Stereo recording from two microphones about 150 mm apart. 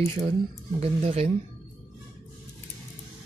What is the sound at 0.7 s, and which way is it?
Speech, 45° right (ahead or behind).